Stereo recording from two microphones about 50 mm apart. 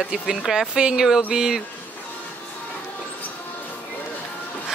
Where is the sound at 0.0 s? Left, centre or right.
Centre.